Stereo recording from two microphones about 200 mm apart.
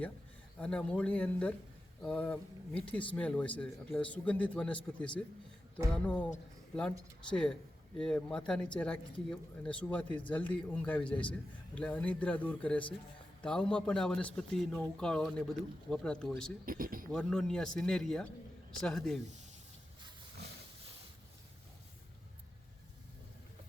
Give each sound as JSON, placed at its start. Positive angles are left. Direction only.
{"t": 0.6, "sound": "a man's voice", "side_deg": 5}
{"t": 7.3, "sound": "a man's voice", "side_deg": 5}
{"t": 16.6, "sound": "speech", "side_deg": -45}
{"t": 17.1, "sound": "a man's voice", "side_deg": 5}